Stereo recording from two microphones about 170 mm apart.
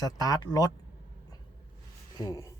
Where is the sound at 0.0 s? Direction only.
20° left (ahead or behind).